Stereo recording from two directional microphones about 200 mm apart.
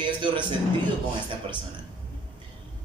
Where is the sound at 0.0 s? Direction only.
25° right (ahead or behind).